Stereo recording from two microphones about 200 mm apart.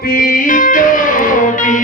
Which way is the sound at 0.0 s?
45° left (ahead or behind).